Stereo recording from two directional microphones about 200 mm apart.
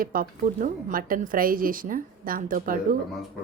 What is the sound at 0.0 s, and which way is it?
Speech, 45° right (ahead or behind).